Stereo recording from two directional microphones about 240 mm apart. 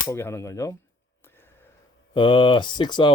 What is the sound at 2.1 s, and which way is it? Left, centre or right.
Speech, left.